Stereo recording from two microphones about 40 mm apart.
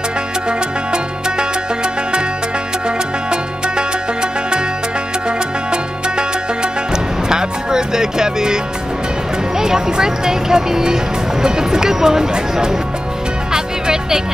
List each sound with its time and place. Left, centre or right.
0.5 s music: right
3.3 s music: right
5.7 s music: right
9.6 s speech: centre
13.5 s music: centre